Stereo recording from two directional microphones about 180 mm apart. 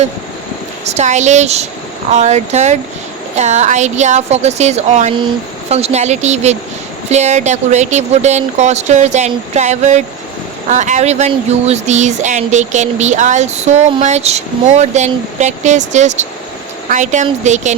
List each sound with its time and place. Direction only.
0.9 s a woman's voice: 40° right (ahead or behind)